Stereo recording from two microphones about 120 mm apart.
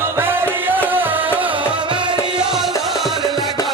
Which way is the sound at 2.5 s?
Centre (ahead or behind).